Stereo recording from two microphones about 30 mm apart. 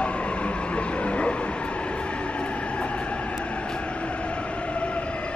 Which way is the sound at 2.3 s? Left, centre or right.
Left.